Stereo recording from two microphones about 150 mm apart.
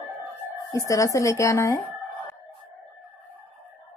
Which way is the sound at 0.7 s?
20° left (ahead or behind).